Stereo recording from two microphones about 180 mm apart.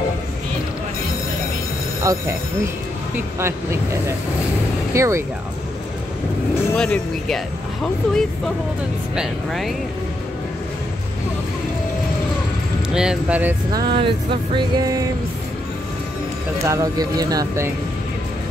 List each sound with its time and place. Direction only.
2.1 s speech: 15° right (ahead or behind)
3.3 s speech: 15° right (ahead or behind)
6.8 s speech: 5° left (ahead or behind)
12.9 s speech: 5° right (ahead or behind)
13.7 s music: 25° right (ahead or behind)
16.6 s music: 20° right (ahead or behind)